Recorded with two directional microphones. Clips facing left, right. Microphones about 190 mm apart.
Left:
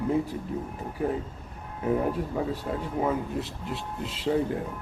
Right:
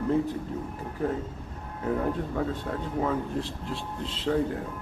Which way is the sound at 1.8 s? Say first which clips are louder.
Left 2 dB; 15° left (ahead or behind).